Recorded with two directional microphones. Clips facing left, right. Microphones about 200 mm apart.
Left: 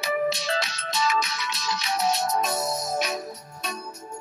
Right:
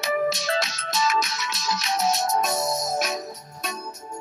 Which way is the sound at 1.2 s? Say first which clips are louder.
Right 1 dB; 45° right (ahead or behind).